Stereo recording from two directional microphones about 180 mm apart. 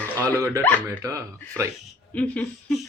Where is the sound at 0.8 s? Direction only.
15° right (ahead or behind).